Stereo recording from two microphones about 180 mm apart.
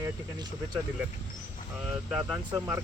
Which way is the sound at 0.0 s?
25° right (ahead or behind).